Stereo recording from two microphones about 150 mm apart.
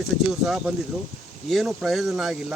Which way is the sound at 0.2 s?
Centre (ahead or behind).